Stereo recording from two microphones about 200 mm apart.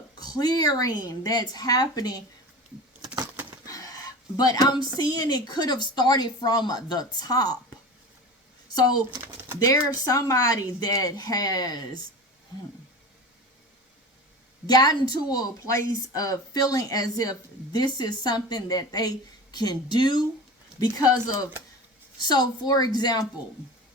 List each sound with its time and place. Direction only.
0.2 s speech: 20° left (ahead or behind)
3.7 s a sound: 15° left (ahead or behind)
4.9 s speech: 20° left (ahead or behind)
9.2 s speech: 10° right (ahead or behind)
9.6 s speech: 15° left (ahead or behind)
14.7 s speech: 20° left (ahead or behind)